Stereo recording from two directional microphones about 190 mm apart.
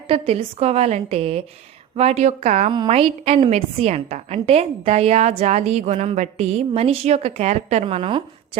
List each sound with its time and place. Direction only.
0.1 s a woman's voice: 30° right (ahead or behind)